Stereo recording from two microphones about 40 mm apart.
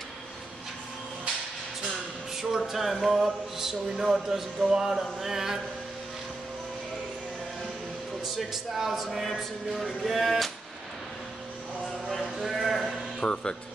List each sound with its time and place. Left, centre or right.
2.6 s speech: centre
8.4 s speech: centre
9.2 s speech: centre
11.8 s a sound: centre
12.4 s speech: centre
13.2 s speech: centre